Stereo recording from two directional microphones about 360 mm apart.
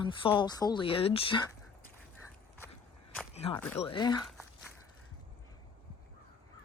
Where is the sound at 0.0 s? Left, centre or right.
Centre.